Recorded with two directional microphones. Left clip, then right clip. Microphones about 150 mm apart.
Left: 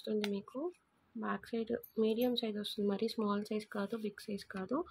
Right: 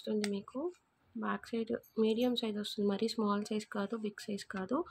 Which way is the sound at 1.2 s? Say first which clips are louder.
Right 1 dB; 5° right (ahead or behind).